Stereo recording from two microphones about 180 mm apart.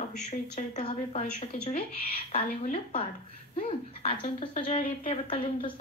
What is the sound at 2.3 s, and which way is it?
Speech, 40° left (ahead or behind).